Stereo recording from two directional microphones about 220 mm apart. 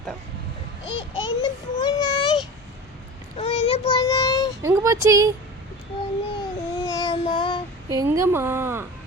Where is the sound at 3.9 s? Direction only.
15° left (ahead or behind).